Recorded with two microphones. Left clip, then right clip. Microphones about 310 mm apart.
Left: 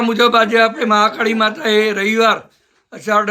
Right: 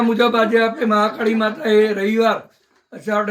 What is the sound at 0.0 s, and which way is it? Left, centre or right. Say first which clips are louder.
A man's voice: left 3 dB; centre.